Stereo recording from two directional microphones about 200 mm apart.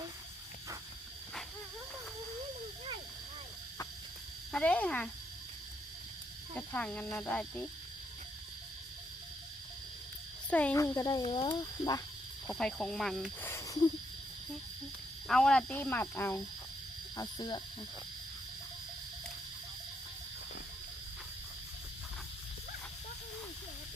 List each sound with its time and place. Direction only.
4.5 s speech: 5° left (ahead or behind)
6.6 s speech: 5° left (ahead or behind)
10.5 s speech: 5° left (ahead or behind)
12.5 s speech: 5° left (ahead or behind)
15.3 s speech: 5° left (ahead or behind); by 17.6 s 20° left (ahead or behind)